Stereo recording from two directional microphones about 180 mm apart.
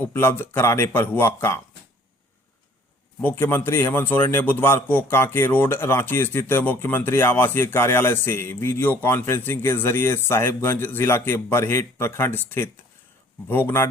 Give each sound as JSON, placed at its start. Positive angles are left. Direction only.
{"t": 0.0, "sound": "a man's voice", "side_deg": 10}
{"t": 3.2, "sound": "a man's voice", "side_deg": 10}